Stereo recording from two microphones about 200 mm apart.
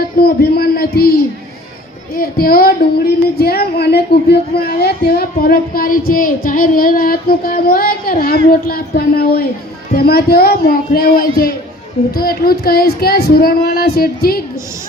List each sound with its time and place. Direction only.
0.0 s a man's voice: 50° left (ahead or behind)